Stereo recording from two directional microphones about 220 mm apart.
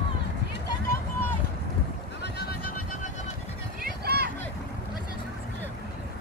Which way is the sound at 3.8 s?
45° right (ahead or behind).